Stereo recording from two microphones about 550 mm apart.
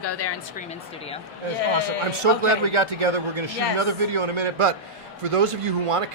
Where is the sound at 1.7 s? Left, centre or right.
Right.